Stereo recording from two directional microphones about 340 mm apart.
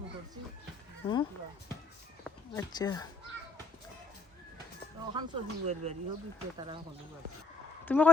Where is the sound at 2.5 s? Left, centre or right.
Centre.